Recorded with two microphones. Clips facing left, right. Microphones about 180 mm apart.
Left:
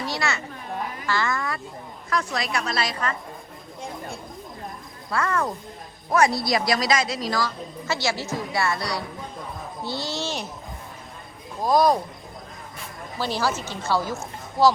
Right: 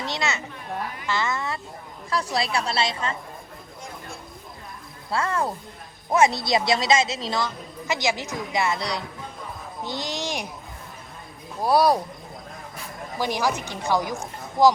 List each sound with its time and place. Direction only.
0.0 s a child's voice: 20° right (ahead or behind)
5.1 s a woman's voice: 30° right (ahead or behind)
11.6 s speech: 10° right (ahead or behind)
13.1 s speech: 15° right (ahead or behind)